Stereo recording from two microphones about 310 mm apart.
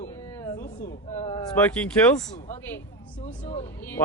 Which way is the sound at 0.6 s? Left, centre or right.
Left.